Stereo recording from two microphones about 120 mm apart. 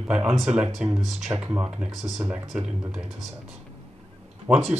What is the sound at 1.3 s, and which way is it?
Speech, 15° right (ahead or behind).